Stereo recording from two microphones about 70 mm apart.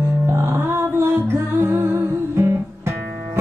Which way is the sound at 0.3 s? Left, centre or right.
Right.